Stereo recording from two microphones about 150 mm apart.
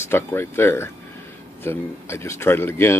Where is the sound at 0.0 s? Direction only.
15° left (ahead or behind).